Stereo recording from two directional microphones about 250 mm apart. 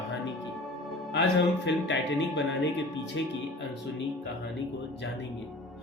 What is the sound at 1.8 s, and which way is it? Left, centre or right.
Speech, left.